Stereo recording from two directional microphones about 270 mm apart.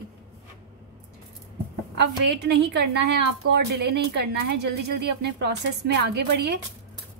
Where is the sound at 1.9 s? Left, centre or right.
Right.